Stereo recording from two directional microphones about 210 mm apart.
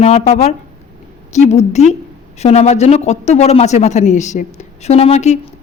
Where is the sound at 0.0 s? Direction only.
30° left (ahead or behind).